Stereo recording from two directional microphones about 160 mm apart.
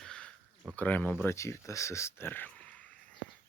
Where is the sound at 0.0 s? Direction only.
5° left (ahead or behind).